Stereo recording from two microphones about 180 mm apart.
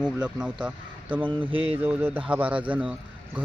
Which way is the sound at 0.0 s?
5° right (ahead or behind).